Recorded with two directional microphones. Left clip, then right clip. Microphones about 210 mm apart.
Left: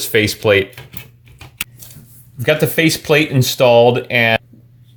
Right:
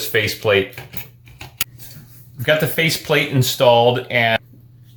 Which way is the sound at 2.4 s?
40° left (ahead or behind).